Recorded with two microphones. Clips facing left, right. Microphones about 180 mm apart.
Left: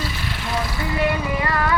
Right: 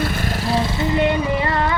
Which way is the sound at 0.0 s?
50° right (ahead or behind).